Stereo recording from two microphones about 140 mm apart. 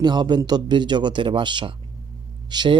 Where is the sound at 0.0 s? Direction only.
30° right (ahead or behind).